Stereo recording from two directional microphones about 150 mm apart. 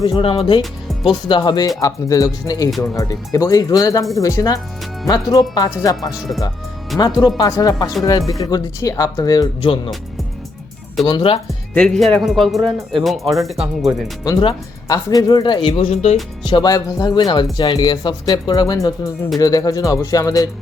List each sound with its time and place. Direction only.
0.0 s speech: 35° left (ahead or behind)
2.6 s speech: centre (ahead or behind)
2.9 s speech: 20° left (ahead or behind)
9.6 s speech: 35° left (ahead or behind)
11.0 s speech: 35° left (ahead or behind)
11.7 s speech: 5° left (ahead or behind)
14.3 s speech: 25° left (ahead or behind); by 16.1 s 45° left (ahead or behind)
16.4 s speech: 30° left (ahead or behind)